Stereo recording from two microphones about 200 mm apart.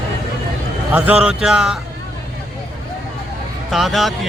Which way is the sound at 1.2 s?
5° right (ahead or behind).